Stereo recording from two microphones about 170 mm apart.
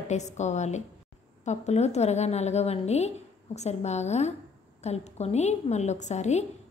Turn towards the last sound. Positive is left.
turn(degrees=40)  # may be behind; listen again after turning